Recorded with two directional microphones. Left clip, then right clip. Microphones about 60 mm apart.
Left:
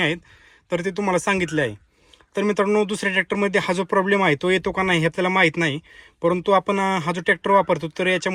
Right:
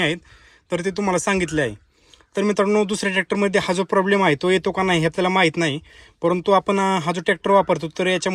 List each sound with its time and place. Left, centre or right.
0.7 s speech: right